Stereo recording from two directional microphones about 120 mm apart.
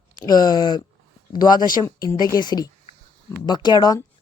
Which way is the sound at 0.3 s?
35° left (ahead or behind).